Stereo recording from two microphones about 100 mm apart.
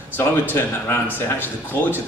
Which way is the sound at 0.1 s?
20° left (ahead or behind).